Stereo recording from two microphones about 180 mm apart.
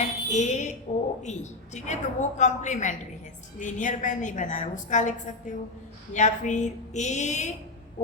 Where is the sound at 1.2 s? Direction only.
40° left (ahead or behind).